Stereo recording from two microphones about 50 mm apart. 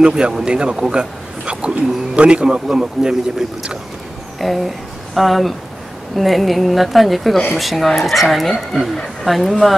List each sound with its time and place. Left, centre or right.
0.0 s speech: centre
4.4 s speech: centre